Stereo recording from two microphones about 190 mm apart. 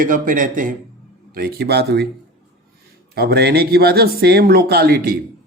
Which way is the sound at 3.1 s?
60° right (ahead or behind).